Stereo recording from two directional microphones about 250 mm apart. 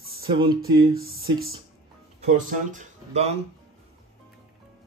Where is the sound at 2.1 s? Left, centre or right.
Right.